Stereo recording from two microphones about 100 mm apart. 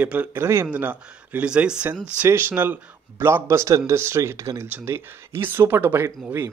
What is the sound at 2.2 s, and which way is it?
A man's voice, 20° right (ahead or behind).